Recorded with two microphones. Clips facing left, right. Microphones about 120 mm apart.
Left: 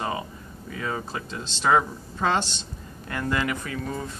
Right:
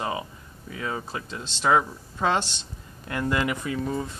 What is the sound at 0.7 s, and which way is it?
Speech, 5° right (ahead or behind).